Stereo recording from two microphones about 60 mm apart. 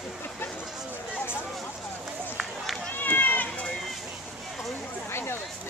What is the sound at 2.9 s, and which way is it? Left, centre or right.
Run, left.